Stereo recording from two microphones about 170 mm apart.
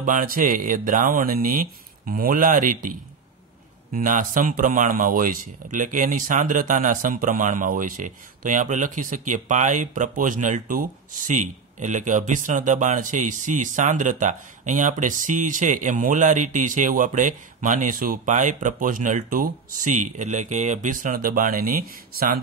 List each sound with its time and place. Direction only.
0.0 s speech: 55° right (ahead or behind)
3.9 s speech: 55° right (ahead or behind)